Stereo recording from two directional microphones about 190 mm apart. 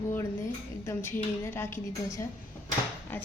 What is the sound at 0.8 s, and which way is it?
Cutlery, 15° left (ahead or behind).